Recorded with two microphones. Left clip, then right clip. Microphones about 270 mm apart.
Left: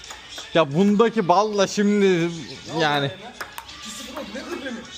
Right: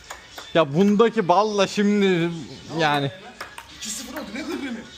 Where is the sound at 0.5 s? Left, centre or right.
Centre.